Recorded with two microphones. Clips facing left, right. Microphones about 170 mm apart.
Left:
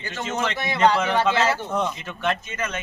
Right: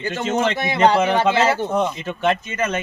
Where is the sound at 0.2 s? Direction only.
25° right (ahead or behind).